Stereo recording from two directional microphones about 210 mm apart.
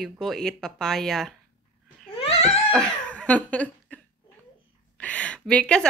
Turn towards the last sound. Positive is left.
turn(degrees=5)  # may be behind; listen again after turning